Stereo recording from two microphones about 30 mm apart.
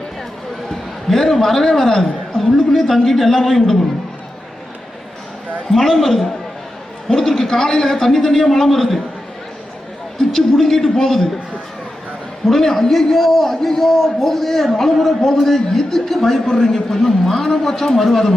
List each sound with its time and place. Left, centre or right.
0.7 s a man's voice: centre
5.7 s a man's voice: centre
10.2 s a man's voice: centre
12.5 s a man's voice: centre